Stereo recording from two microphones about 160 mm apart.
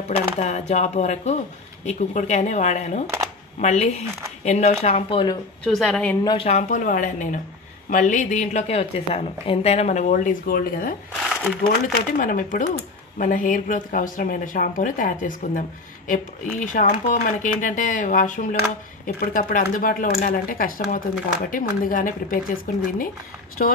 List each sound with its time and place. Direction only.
0.1 s a woman's voice: 45° left (ahead or behind)
5.7 s a woman's voice: 5° left (ahead or behind)
6.2 s a woman's voice: 35° left (ahead or behind); by 11.0 s 65° left (ahead or behind)
11.2 s crumpling: 10° right (ahead or behind)
11.8 s a woman's voice: 55° left (ahead or behind)
19.1 s speech: 65° left (ahead or behind)
23.6 s speech: 55° left (ahead or behind)